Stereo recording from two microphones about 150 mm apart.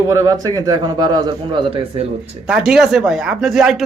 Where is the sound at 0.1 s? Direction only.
20° right (ahead or behind).